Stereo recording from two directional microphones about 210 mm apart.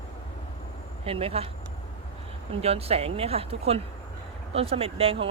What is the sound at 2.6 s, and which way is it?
Speech, 30° right (ahead or behind).